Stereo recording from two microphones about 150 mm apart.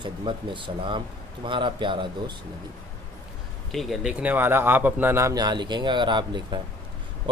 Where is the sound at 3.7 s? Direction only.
Centre (ahead or behind).